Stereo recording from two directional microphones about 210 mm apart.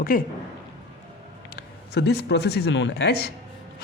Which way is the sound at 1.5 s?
50° left (ahead or behind).